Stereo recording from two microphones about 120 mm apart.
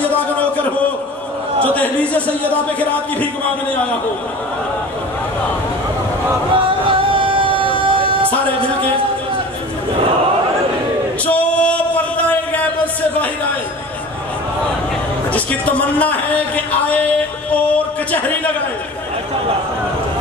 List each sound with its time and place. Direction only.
1.7 s speech: 10° left (ahead or behind)
6.5 s music: 45° right (ahead or behind)
11.2 s a sound: 10° left (ahead or behind)
15.3 s speech: 10° left (ahead or behind)